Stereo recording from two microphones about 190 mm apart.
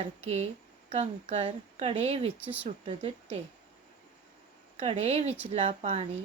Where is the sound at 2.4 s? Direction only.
10° right (ahead or behind).